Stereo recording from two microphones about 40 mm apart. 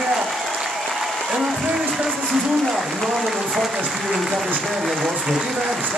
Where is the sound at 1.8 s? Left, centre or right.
Centre.